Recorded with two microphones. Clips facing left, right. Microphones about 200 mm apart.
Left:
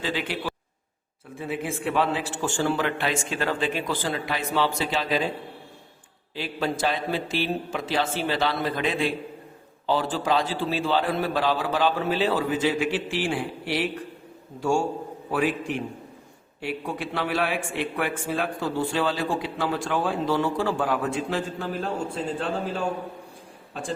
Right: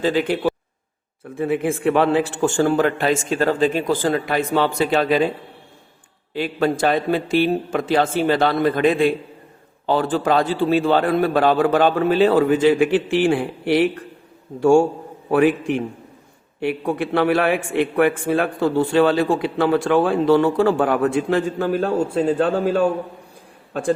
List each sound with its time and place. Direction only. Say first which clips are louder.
0.0 s a man's voice: right 10 dB; 45° right (ahead or behind)
1.4 s a man's voice: right 9 dB; 55° right (ahead or behind)
6.3 s a man's voice: right 8 dB; 55° right (ahead or behind)